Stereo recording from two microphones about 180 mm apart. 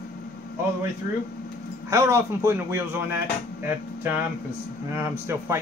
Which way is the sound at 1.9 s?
15° right (ahead or behind).